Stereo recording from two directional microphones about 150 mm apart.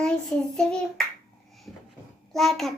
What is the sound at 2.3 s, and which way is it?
Speech, centre (ahead or behind).